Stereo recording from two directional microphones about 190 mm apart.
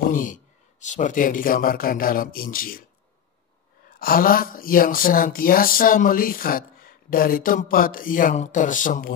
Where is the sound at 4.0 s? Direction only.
50° left (ahead or behind).